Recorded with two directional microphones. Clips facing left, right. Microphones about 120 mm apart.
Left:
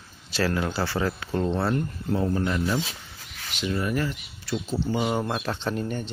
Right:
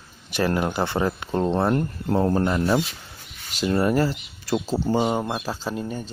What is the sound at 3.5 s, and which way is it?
Speech, 40° right (ahead or behind).